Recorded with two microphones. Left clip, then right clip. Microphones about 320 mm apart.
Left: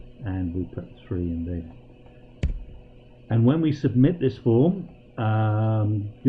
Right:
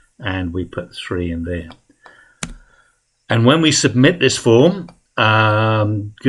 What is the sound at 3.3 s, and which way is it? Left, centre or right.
Speech, centre.